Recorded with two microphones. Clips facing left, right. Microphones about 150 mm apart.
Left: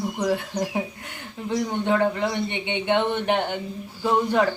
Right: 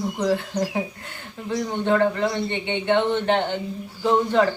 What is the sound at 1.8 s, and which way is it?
A woman's voice, 15° left (ahead or behind).